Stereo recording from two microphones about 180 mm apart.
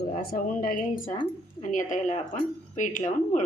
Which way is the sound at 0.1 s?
55° left (ahead or behind).